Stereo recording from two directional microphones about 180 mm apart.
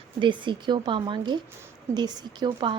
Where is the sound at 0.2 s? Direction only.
25° right (ahead or behind).